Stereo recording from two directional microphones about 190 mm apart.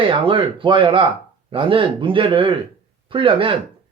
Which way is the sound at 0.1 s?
25° right (ahead or behind).